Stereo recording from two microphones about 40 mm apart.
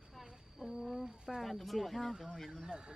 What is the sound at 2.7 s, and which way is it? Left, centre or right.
Speech, right.